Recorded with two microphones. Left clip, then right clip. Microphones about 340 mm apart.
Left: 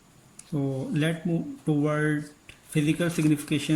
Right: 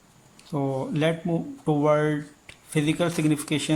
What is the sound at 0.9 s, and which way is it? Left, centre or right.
Speech, centre.